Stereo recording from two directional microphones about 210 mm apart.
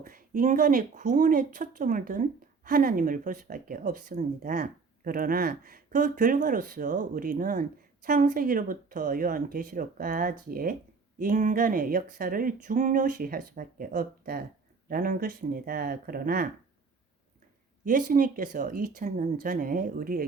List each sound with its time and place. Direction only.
0.0 s speech: 40° right (ahead or behind)
17.8 s speech: 40° right (ahead or behind)